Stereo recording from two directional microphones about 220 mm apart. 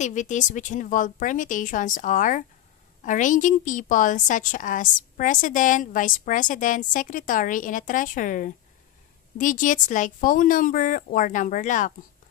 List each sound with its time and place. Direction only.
0.0 s a woman's voice: 35° left (ahead or behind)